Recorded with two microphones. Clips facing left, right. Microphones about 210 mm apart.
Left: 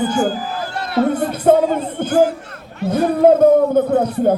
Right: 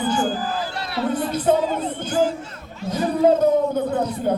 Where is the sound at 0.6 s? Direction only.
50° left (ahead or behind).